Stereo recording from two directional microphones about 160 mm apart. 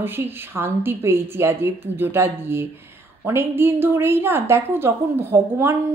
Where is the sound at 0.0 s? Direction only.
15° right (ahead or behind).